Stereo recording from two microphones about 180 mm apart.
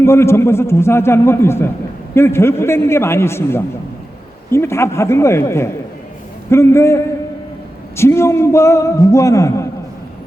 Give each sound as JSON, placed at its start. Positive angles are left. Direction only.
{"t": 0.0, "sound": "a man's voice", "side_deg": 15}